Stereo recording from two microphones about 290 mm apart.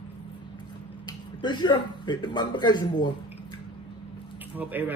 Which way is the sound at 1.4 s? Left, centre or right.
Centre.